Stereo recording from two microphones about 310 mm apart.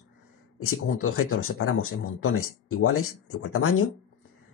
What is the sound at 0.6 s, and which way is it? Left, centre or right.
Speech, left.